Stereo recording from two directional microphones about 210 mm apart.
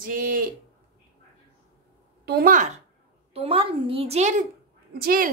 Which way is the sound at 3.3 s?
25° right (ahead or behind).